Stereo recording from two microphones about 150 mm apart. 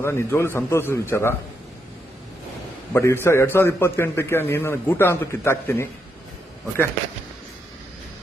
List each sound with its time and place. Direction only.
0.0 s a man's voice: 15° left (ahead or behind)
2.9 s a man's voice: 20° left (ahead or behind)